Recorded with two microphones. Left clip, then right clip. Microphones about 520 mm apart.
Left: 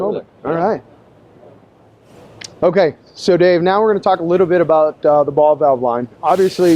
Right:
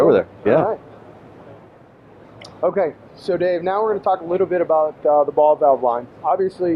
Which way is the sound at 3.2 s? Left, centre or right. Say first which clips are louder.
Left 7 dB; left.